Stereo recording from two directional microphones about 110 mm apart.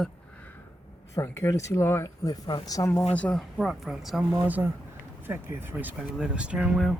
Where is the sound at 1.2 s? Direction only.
25° left (ahead or behind).